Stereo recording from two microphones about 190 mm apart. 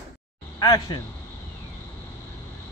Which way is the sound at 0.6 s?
20° left (ahead or behind).